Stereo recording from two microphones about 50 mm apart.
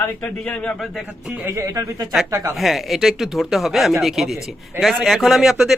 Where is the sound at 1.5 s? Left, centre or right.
Right.